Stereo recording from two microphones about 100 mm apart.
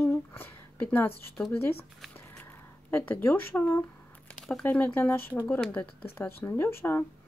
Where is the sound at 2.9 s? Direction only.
20° left (ahead or behind).